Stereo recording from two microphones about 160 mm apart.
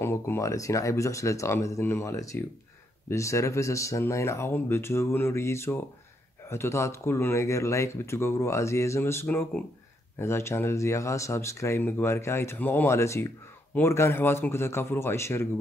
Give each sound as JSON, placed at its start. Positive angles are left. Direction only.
{"t": 0.0, "sound": "speech", "side_deg": 15}